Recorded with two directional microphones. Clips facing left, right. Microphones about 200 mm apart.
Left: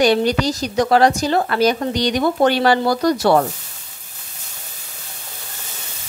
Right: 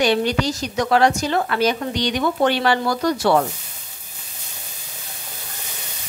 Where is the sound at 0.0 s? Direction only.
40° left (ahead or behind).